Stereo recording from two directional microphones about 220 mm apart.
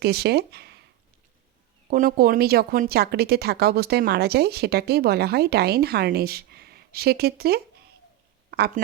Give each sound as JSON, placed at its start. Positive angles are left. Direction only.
{"t": 0.0, "sound": "speech", "side_deg": -45}
{"t": 1.9, "sound": "a woman's voice", "side_deg": -40}